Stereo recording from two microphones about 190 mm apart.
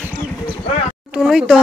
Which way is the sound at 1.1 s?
5° right (ahead or behind).